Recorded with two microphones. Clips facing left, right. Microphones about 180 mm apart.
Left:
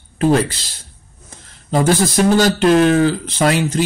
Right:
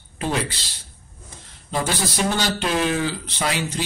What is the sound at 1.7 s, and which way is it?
Speech, 45° left (ahead or behind).